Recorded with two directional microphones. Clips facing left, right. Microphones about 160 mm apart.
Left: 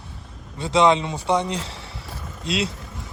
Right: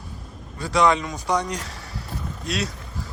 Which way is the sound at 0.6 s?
25° left (ahead or behind).